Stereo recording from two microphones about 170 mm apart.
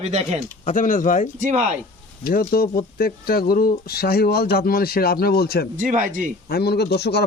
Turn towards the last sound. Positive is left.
turn(degrees=75)  # may be behind; listen again after turning